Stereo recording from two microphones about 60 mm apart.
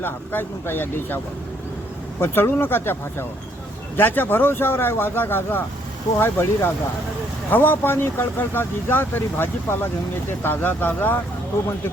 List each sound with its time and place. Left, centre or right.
0.0 s speech: left
2.2 s speech: left